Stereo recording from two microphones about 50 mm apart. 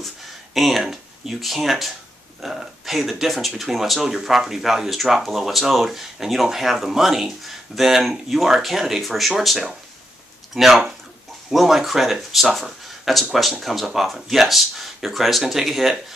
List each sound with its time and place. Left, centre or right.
0.6 s speech: centre